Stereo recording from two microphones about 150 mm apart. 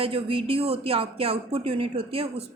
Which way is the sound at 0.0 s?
40° right (ahead or behind).